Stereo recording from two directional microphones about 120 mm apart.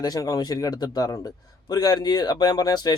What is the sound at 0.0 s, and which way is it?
A man's voice, 30° left (ahead or behind).